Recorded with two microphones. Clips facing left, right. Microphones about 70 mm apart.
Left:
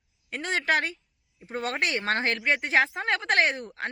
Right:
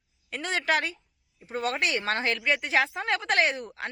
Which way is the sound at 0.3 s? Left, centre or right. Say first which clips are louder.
Left 1 dB; left.